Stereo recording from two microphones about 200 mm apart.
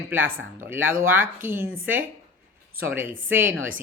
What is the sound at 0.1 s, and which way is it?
A man's voice, 10° right (ahead or behind).